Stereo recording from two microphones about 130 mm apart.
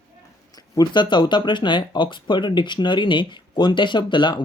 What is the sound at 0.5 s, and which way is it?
Speech, 30° left (ahead or behind).